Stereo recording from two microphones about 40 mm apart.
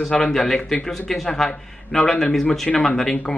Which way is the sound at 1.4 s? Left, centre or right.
Centre.